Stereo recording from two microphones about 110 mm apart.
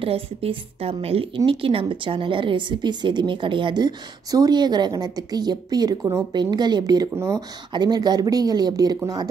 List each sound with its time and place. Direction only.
0.0 s a woman's voice: 60° right (ahead or behind); by 7.1 s 40° right (ahead or behind)
7.2 s speech: 25° right (ahead or behind)
7.7 s speech: 40° right (ahead or behind)